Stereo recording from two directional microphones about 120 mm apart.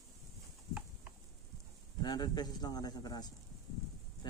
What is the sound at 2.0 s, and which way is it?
Speech, 35° left (ahead or behind).